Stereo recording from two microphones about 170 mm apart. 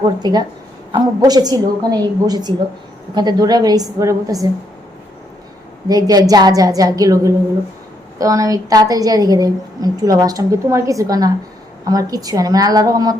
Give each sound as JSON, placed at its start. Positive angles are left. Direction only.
{"t": 0.2, "sound": "a woman's voice", "side_deg": -25}
{"t": 5.9, "sound": "a woman's voice", "side_deg": -20}